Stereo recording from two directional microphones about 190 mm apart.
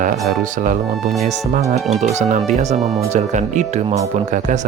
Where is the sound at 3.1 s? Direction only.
40° right (ahead or behind).